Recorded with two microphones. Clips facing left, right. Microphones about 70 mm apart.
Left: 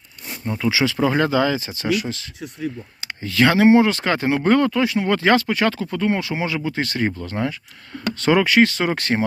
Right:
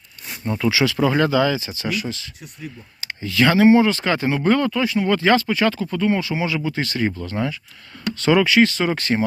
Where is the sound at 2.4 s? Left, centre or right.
Left.